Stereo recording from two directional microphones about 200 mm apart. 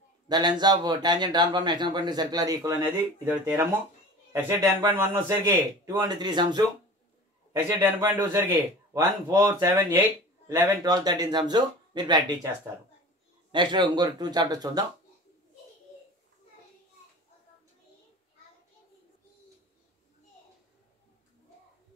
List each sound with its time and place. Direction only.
0.3 s a man's voice: 20° right (ahead or behind)
13.5 s a man's voice: 25° right (ahead or behind)